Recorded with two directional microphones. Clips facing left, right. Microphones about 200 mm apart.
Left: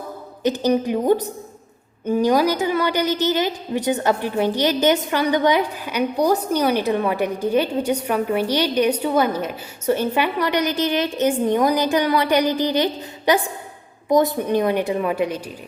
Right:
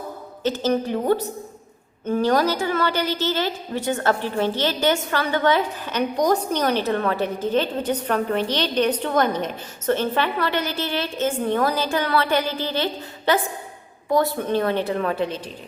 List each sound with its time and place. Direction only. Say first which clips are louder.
0.4 s a woman's voice: left 3 dB; 15° left (ahead or behind)